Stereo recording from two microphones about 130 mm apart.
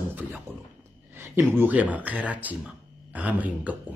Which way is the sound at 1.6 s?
10° right (ahead or behind).